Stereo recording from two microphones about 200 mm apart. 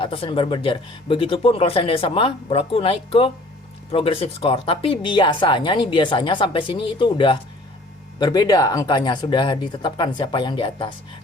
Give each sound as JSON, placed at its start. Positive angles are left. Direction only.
{"t": 0.0, "sound": "speech", "side_deg": 25}